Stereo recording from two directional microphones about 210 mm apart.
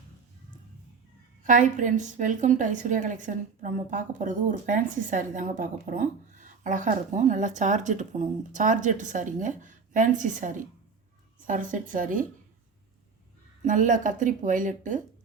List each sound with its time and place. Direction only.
1.5 s a woman's voice: 40° right (ahead or behind)
13.7 s a woman's voice: 40° right (ahead or behind)